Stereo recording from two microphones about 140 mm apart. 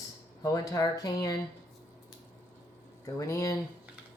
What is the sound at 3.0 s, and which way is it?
Speech, 25° left (ahead or behind).